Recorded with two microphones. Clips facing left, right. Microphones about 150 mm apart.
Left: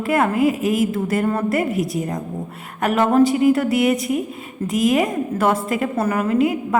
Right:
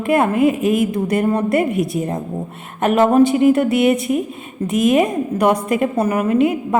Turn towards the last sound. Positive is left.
turn(degrees=-25)  # may be behind; listen again after turning